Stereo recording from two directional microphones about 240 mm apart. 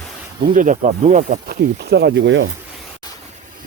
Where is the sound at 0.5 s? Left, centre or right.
Right.